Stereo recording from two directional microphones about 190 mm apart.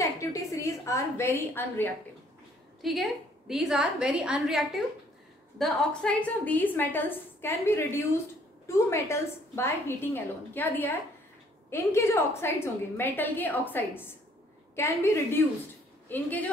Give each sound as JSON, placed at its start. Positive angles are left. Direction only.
{"t": 0.0, "sound": "a woman's voice", "side_deg": 15}
{"t": 2.8, "sound": "a woman's voice", "side_deg": 0}
{"t": 15.4, "sound": "a woman's voice", "side_deg": 10}